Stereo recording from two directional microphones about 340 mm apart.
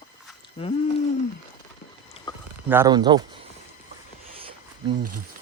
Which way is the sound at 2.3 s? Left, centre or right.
Centre.